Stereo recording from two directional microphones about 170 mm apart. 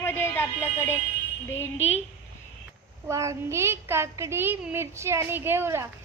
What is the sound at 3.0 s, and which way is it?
A woman's voice, 15° right (ahead or behind).